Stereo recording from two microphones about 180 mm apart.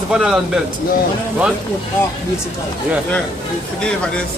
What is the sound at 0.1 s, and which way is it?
Speech, 5° right (ahead or behind).